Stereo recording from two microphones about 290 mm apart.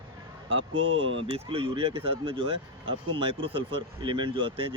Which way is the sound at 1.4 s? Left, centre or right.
Centre.